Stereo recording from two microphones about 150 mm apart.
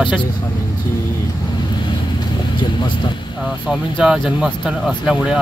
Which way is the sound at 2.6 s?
30° left (ahead or behind).